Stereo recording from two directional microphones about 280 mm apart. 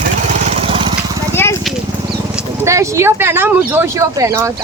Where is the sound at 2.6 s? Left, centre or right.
Centre.